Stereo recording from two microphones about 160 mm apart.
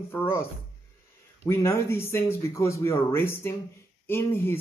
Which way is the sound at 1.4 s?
15° left (ahead or behind).